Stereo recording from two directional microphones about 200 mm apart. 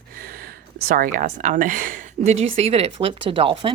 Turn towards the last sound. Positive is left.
turn(degrees=-25)  # may be behind; listen again after turning